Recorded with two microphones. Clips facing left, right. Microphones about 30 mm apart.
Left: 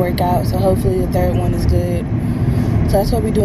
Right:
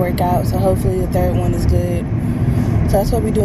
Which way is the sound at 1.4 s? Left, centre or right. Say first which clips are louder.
Even; left.